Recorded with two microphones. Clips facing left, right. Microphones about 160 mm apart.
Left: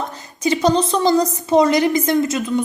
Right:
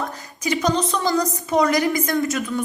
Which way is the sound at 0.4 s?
30° left (ahead or behind).